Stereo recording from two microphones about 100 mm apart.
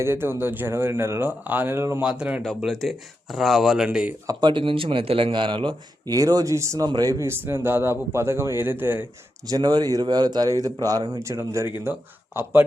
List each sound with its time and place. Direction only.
0.0 s speech: 25° right (ahead or behind)
2.0 s speech: 10° right (ahead or behind)
2.7 s speech: centre (ahead or behind)
4.3 s speech: 50° right (ahead or behind)
6.1 s speech: 35° right (ahead or behind); by 9.0 s 20° right (ahead or behind)
9.5 s speech: 40° right (ahead or behind)
11.2 s speech: 30° right (ahead or behind)